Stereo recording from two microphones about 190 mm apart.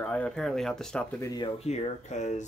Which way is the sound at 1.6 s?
35° left (ahead or behind).